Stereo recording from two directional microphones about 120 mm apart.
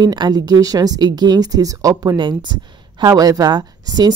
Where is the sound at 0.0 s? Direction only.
35° right (ahead or behind).